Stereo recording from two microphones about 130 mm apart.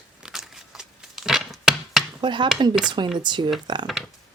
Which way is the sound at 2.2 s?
35° right (ahead or behind).